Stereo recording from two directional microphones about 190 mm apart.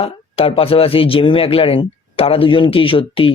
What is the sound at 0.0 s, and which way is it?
Speech, 30° left (ahead or behind).